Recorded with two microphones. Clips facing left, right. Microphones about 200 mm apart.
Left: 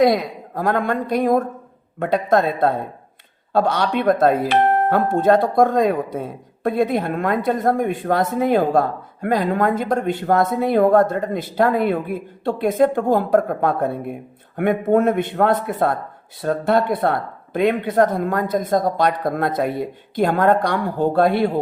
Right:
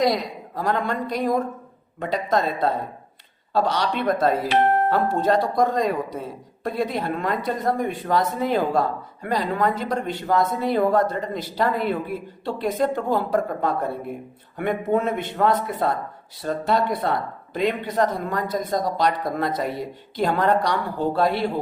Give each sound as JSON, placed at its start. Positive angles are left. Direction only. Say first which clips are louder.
{"t": 0.0, "sound": "speech", "louder": "left 5 dB", "side_deg": 55}